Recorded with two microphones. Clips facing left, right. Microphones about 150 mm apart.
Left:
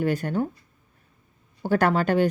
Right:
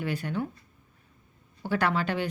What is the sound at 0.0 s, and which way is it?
Speech, 45° left (ahead or behind).